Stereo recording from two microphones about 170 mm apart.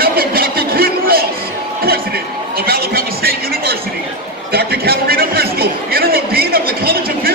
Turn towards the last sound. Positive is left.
turn(degrees=-60)  # may be behind; listen again after turning